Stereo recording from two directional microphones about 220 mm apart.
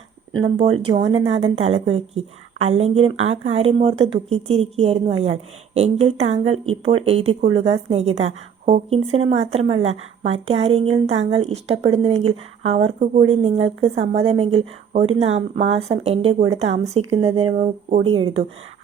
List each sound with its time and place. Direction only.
0.6 s a woman's voice: 25° right (ahead or behind)
3.2 s speech: 70° right (ahead or behind)
3.6 s a woman's voice: 25° right (ahead or behind)